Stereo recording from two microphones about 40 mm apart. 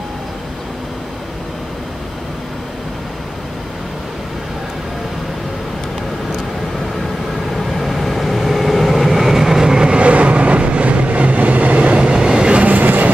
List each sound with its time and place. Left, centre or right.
7.5 s vehicle: centre; by 12.0 s right
12.0 s train: right
12.6 s train: right